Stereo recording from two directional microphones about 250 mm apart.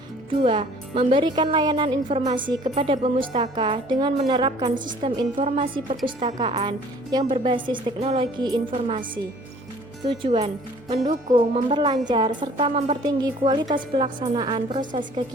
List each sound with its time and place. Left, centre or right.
0.4 s a woman's voice: right
4.7 s a woman's voice: right
5.1 s a woman's voice: right
10.1 s a woman's voice: right